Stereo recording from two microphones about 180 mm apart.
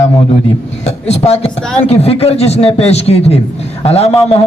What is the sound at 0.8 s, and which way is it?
A man's voice, 35° left (ahead or behind).